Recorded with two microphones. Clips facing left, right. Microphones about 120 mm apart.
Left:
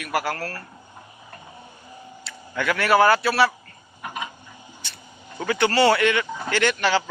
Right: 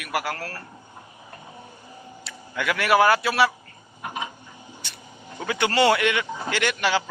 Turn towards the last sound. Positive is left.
turn(degrees=-10)  # may be behind; listen again after turning